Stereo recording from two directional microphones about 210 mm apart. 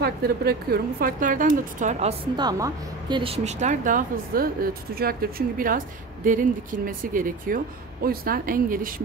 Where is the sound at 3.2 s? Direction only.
30° right (ahead or behind).